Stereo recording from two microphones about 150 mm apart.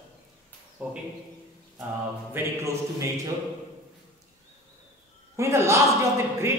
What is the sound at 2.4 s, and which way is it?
Speech, 15° right (ahead or behind).